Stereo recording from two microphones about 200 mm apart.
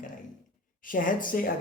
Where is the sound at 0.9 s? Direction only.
45° left (ahead or behind).